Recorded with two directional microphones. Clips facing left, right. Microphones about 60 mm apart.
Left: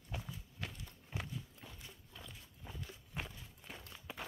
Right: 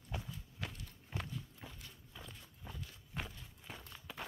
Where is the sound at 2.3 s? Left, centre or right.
Centre.